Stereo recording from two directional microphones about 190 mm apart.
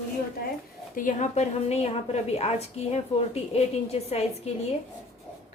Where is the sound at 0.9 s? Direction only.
40° left (ahead or behind).